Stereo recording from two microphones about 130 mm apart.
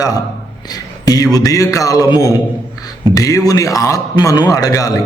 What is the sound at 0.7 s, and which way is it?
A man's voice, 30° left (ahead or behind).